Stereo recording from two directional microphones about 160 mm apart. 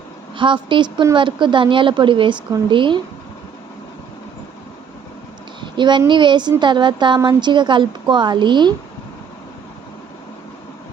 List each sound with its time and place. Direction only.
0.3 s a woman's voice: 30° right (ahead or behind)
5.5 s a sound: 30° right (ahead or behind)
6.1 s a woman's voice: 30° right (ahead or behind)